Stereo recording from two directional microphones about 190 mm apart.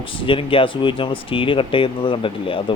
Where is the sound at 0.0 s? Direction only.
25° left (ahead or behind).